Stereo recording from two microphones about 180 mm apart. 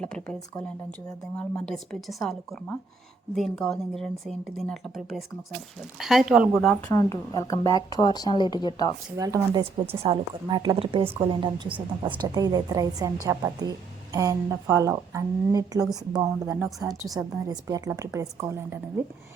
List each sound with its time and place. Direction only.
0.0 s a woman's voice: 5° left (ahead or behind)
6.9 s speech: 20° left (ahead or behind)
9.1 s a woman's voice: 20° right (ahead or behind)